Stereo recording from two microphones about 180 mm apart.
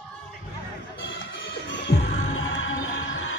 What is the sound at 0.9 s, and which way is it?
Music, 85° left.